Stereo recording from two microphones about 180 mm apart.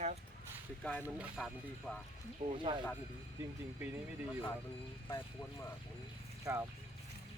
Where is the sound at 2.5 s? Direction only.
25° right (ahead or behind).